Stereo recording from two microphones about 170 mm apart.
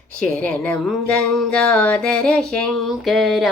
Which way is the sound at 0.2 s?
5° left (ahead or behind).